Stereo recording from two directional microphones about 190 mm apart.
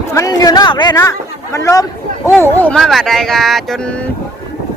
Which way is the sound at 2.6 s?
5° left (ahead or behind).